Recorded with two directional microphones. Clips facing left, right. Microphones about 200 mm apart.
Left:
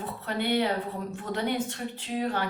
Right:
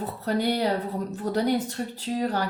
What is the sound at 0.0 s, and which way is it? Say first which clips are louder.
A woman's voice: right 5 dB; 40° right (ahead or behind).